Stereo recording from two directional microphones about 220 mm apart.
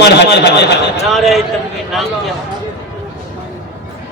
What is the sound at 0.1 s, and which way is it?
Speech, 50° left (ahead or behind).